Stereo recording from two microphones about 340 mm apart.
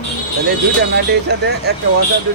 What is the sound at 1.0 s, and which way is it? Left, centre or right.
Speech, right.